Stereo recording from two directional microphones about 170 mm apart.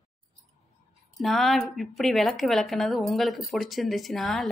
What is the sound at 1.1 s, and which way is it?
A woman's voice, centre (ahead or behind).